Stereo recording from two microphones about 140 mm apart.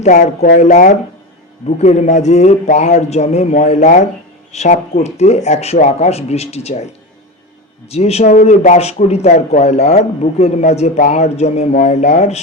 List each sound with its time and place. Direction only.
0.0 s speech: 65° left (ahead or behind); by 8.3 s 50° left (ahead or behind)
8.3 s speech: 65° left (ahead or behind)